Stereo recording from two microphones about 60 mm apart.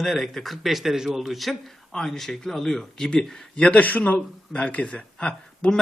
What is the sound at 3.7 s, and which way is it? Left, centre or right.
Speech, left.